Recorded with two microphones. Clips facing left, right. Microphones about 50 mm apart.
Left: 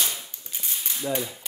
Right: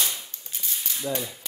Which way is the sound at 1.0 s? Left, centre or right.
Centre.